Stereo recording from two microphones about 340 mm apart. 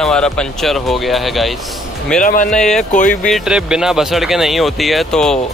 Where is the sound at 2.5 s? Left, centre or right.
Centre.